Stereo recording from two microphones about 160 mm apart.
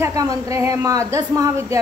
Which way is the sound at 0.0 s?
20° right (ahead or behind).